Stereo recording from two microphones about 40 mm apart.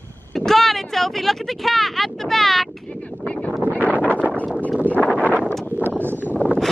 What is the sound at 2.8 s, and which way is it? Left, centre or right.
Speech, left.